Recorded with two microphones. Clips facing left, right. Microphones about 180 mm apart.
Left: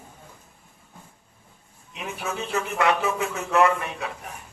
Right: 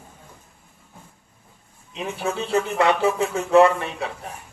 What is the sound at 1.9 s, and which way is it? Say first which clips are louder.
Speech: right 5 dB; 30° right (ahead or behind).